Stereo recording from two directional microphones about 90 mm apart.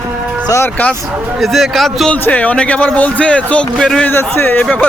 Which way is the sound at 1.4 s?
Centre (ahead or behind).